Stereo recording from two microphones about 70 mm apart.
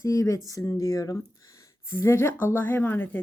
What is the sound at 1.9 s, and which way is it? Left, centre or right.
A woman's voice, left.